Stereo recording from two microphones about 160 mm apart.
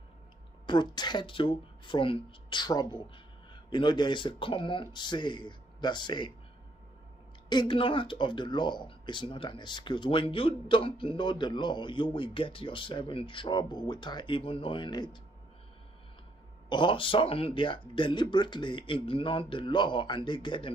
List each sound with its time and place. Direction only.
0.7 s speech: 25° left (ahead or behind)
7.4 s speech: 30° left (ahead or behind)
16.6 s speech: 30° left (ahead or behind)